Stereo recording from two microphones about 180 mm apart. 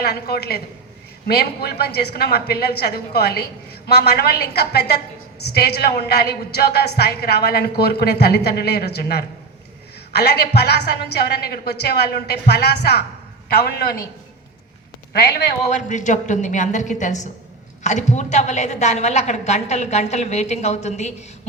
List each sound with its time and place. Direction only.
0.0 s a woman's voice: 60° left (ahead or behind)
15.1 s a woman's voice: 60° left (ahead or behind)
15.7 s a woman's voice: 45° left (ahead or behind)